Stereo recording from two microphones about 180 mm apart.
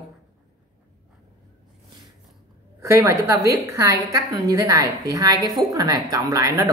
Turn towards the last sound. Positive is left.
turn(degrees=-20)  # may be behind; listen again after turning